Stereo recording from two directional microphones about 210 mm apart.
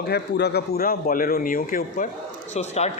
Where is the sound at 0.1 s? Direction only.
50° left (ahead or behind).